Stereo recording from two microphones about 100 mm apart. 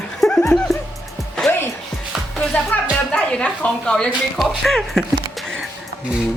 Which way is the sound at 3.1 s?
10° left (ahead or behind).